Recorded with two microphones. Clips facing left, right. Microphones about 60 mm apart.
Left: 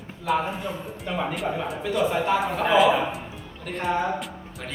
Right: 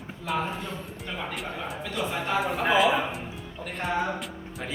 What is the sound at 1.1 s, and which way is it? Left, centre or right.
Speech, centre.